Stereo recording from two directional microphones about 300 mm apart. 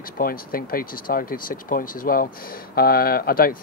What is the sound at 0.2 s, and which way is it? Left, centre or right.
Speech, left.